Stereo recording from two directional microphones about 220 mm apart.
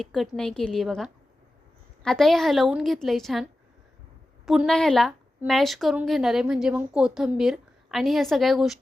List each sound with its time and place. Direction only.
0.0 s a woman's voice: centre (ahead or behind)